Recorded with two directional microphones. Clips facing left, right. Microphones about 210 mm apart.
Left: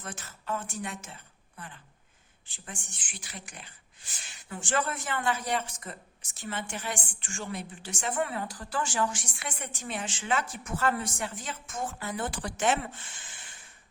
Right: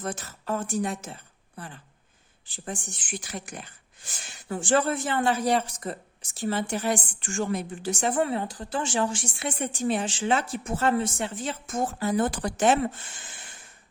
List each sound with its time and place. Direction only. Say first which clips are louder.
0.0 s speech: right 8 dB; 40° right (ahead or behind)